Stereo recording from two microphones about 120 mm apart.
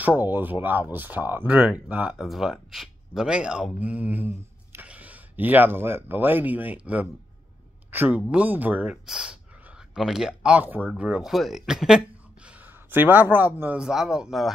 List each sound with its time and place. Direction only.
0.0 s a man's voice: 15° right (ahead or behind)
12.4 s a sound: 15° right (ahead or behind)
13.6 s speech: 10° right (ahead or behind)